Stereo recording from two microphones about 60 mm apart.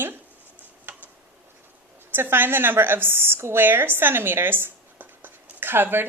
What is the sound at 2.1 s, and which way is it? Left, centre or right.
A woman's voice, right.